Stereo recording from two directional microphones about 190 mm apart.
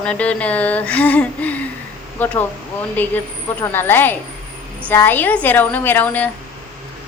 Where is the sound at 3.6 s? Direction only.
10° left (ahead or behind).